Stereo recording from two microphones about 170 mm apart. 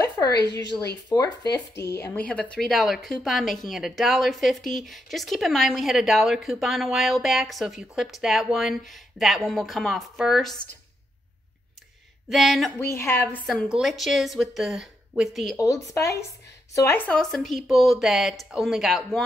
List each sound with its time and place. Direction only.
0.3 s a woman's voice: 75° left (ahead or behind)
1.0 s a woman's voice: 20° left (ahead or behind); by 10.6 s centre (ahead or behind)
12.3 s a woman's voice: centre (ahead or behind)
12.7 s a woman's voice: 15° left (ahead or behind); by 15.5 s centre (ahead or behind)
15.5 s a woman's voice: 20° left (ahead or behind); by 19.2 s centre (ahead or behind)